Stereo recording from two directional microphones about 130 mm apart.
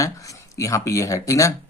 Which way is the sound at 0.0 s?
25° left (ahead or behind).